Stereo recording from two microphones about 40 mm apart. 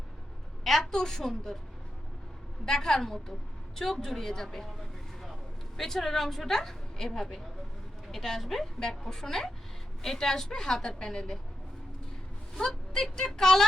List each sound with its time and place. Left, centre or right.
0.6 s a woman's voice: centre
2.6 s a woman's voice: centre
5.7 s a woman's voice: centre
12.6 s a woman's voice: centre